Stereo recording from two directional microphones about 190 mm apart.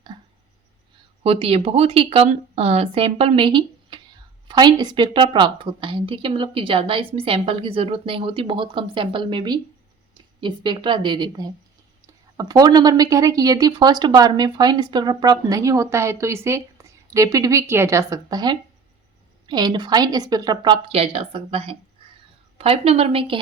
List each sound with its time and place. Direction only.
1.2 s a woman's voice: 30° right (ahead or behind)